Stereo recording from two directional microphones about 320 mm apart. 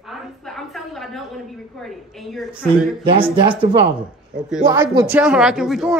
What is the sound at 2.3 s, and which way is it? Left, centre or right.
Speech, centre.